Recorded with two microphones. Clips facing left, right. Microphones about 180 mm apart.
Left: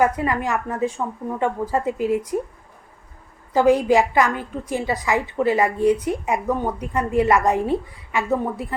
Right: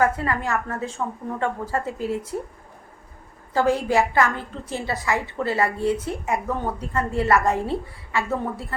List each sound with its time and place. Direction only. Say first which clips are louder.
0.0 s a woman's voice: left 2 dB; 15° left (ahead or behind)
3.5 s a woman's voice: left 5 dB; 15° left (ahead or behind)